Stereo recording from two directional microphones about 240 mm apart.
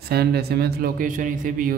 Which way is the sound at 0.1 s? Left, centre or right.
Right.